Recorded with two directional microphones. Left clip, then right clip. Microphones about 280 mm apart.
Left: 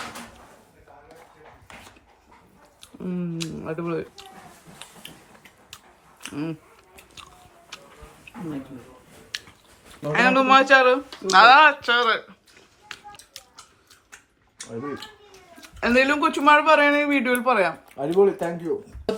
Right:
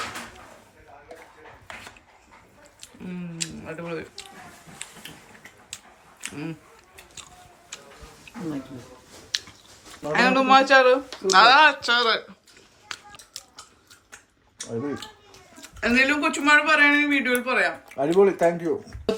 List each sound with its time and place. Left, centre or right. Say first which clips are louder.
2.8 s a sound: left 6 dB; centre
6.2 s speech: left 3 dB; centre
9.3 s a sound: right 5 dB; centre
10.1 s speech: left 1 dB; centre
12.9 s music: right 2 dB; centre
14.6 s a child's voice: right 2 dB; centre
17.9 s speech: right 1 dB; centre